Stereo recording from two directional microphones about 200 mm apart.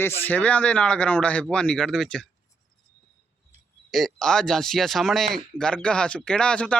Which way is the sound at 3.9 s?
Centre (ahead or behind).